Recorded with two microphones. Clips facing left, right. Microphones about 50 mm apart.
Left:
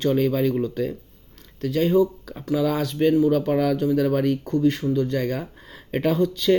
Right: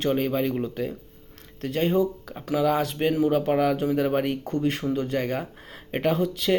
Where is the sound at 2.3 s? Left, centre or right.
Right.